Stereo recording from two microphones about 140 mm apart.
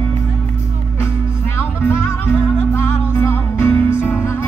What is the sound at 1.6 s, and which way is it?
Music, 20° left (ahead or behind).